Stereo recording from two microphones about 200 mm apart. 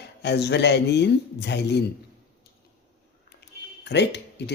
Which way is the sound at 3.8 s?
60° left (ahead or behind).